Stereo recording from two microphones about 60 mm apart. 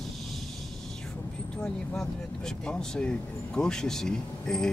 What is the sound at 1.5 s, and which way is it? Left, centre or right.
Speech, centre.